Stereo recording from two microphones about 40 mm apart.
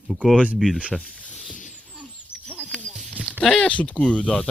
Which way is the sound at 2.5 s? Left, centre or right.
Right.